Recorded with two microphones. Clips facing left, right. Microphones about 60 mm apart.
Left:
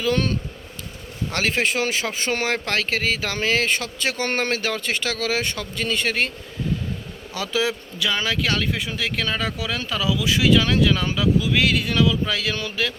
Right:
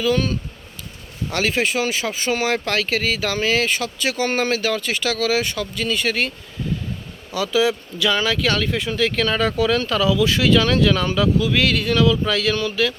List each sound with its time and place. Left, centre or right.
0.0 s speech: left
7.3 s speech: left